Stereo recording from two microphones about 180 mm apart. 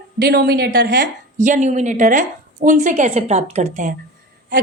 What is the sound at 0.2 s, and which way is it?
Speech, 60° right (ahead or behind).